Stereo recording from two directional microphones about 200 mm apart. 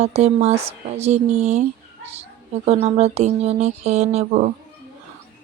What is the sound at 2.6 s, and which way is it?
Speech, 35° right (ahead or behind).